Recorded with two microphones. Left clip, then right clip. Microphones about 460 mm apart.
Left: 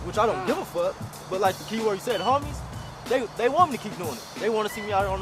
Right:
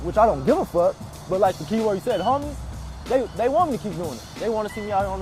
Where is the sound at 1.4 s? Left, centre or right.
Right.